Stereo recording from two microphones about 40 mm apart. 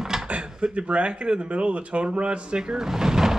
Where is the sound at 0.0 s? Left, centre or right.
Centre.